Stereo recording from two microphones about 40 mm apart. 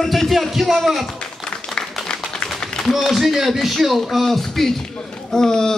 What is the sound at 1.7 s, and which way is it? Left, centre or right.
Applause, centre.